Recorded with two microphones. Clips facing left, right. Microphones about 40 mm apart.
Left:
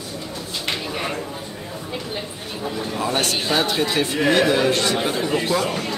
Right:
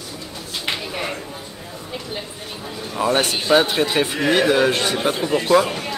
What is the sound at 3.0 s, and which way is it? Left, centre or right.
A man's voice, centre.